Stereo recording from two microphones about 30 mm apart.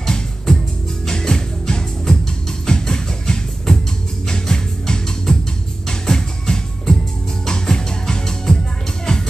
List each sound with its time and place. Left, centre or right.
0.0 s music: centre